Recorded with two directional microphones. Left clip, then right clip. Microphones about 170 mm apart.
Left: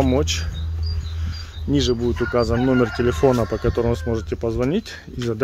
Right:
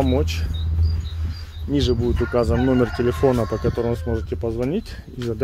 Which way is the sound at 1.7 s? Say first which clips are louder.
Left 1 dB; 10° left (ahead or behind).